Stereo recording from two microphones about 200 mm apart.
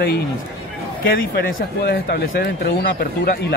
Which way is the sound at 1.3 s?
55° left (ahead or behind).